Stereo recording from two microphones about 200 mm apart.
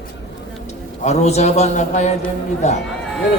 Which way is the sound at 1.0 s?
35° left (ahead or behind).